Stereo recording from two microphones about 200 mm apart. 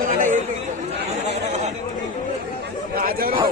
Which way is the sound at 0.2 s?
40° right (ahead or behind).